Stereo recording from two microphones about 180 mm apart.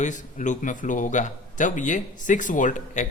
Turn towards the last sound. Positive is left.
turn(degrees=45)  # may be behind; listen again after turning